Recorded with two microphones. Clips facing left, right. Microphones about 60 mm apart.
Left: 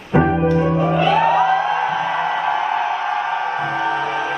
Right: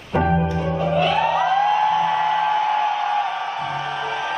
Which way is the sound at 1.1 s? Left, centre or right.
Left.